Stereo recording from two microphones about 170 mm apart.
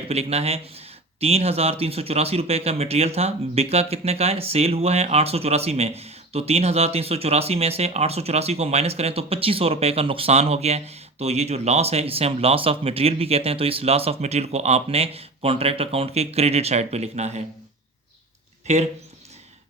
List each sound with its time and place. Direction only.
0.1 s speech: 35° right (ahead or behind)
18.7 s speech: 40° right (ahead or behind)